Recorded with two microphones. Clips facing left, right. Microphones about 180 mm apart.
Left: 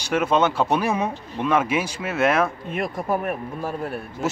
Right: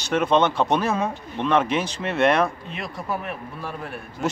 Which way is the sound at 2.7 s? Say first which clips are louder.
Left 5 dB; 50° left (ahead or behind).